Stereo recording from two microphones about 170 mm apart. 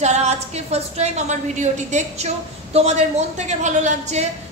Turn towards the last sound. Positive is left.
turn(degrees=-40)  # may be behind; listen again after turning